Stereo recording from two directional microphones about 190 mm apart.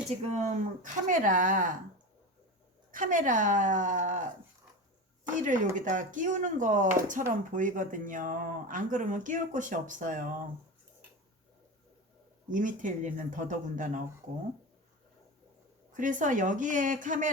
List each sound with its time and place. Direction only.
0.3 s speech: 40° right (ahead or behind)
2.9 s speech: 45° right (ahead or behind)
5.3 s speech: 45° right (ahead or behind)
12.5 s speech: 45° right (ahead or behind)
15.9 s speech: 45° right (ahead or behind)